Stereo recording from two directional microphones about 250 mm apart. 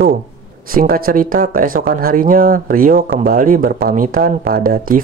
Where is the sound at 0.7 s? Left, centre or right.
Right.